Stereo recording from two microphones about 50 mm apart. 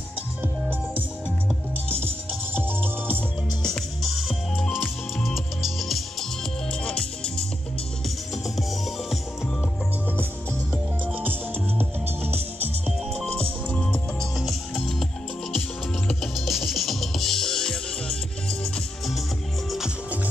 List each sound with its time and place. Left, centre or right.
0.4 s music: right
3.6 s music: centre
6.7 s music: centre
8.5 s music: centre
14.3 s music: centre
16.3 s music: centre